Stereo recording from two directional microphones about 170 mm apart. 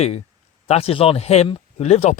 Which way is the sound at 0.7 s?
35° left (ahead or behind).